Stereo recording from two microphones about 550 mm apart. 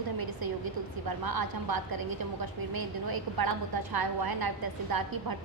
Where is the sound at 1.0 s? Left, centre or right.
Right.